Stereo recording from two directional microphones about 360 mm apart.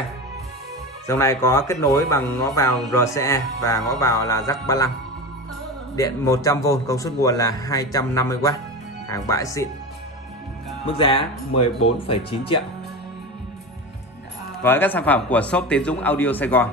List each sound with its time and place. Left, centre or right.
1.0 s a man's voice: centre
5.9 s a man's voice: centre
11.0 s a man's voice: centre
11.5 s speech: left
12.1 s a man's voice: centre
14.6 s a man's voice: centre